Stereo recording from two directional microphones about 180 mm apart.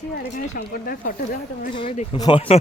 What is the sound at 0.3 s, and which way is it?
Speech, 55° left (ahead or behind).